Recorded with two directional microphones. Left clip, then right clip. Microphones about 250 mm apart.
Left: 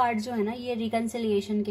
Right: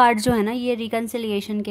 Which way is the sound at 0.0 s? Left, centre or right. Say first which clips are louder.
Right 9 dB; right.